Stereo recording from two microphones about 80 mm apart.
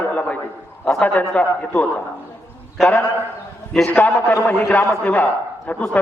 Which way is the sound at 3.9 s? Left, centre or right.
Left.